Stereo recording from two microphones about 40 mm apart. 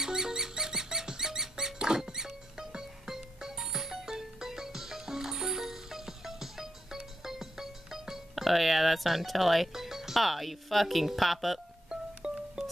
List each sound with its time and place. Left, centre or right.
0.0 s music: centre
7.2 s speech: centre
11.9 s music: centre